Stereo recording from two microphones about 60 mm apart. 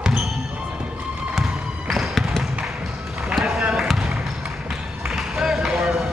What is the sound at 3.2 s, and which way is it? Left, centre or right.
Run, centre.